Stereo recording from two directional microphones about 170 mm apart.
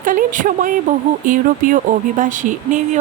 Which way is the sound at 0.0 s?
50° right (ahead or behind).